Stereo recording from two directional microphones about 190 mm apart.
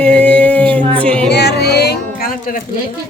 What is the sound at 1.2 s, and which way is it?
Speech, 60° left (ahead or behind).